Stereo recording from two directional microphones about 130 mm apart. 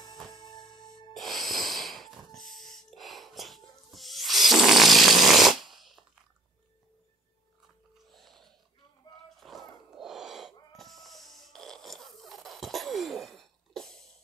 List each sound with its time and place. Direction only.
0.3 s music: 35° left (ahead or behind)
1.1 s snort: centre (ahead or behind)
8.1 s a sound: centre (ahead or behind)
10.8 s snoring: centre (ahead or behind)